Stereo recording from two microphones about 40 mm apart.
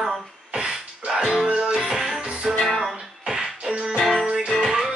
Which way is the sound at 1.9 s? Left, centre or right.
Centre.